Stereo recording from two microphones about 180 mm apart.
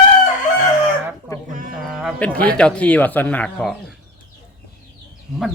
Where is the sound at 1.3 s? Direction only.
15° left (ahead or behind).